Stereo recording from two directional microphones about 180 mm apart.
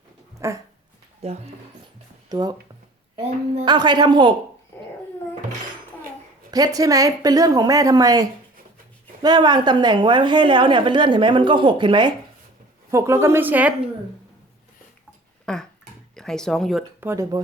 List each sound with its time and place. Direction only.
0.3 s dog: 15° right (ahead or behind)
1.2 s speech: 35° right (ahead or behind)
2.3 s a woman's voice: 20° right (ahead or behind)
3.7 s a woman's voice: 25° right (ahead or behind)
6.5 s a woman's voice: 20° right (ahead or behind)
15.5 s a sound: 5° left (ahead or behind)
16.1 s speech: 5° left (ahead or behind)
17.0 s a woman's voice: 15° right (ahead or behind)